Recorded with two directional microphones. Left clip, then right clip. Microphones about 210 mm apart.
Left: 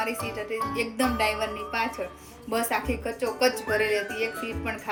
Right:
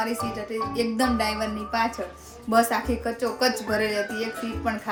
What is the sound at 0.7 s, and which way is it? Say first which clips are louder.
Speech: right 4 dB; 15° right (ahead or behind).